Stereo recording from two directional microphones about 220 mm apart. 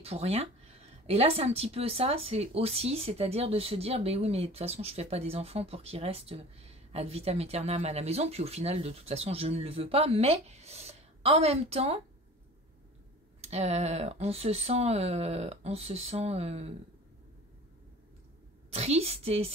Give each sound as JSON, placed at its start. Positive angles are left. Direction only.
{"t": 0.0, "sound": "a woman's voice", "side_deg": -30}
{"t": 13.4, "sound": "a woman's voice", "side_deg": -30}
{"t": 18.7, "sound": "a woman's voice", "side_deg": -30}